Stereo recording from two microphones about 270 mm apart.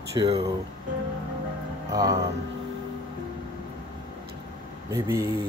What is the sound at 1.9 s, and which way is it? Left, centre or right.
Speech, centre.